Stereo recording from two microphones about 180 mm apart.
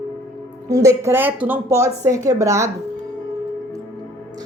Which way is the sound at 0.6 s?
20° right (ahead or behind).